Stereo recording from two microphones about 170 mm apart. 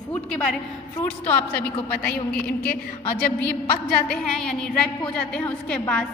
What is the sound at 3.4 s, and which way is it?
A woman's voice, 5° left (ahead or behind).